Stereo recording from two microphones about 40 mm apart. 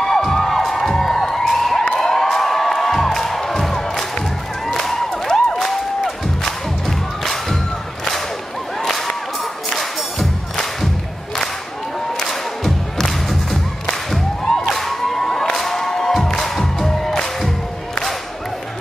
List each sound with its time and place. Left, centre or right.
0.0 s music: centre
8.8 s a sound: centre
9.7 s music: centre
12.2 s music: centre
14.8 s cheering: centre
16.1 s music: centre